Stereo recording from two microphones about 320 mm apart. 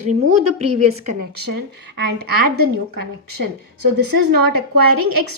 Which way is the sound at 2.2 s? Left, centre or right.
Right.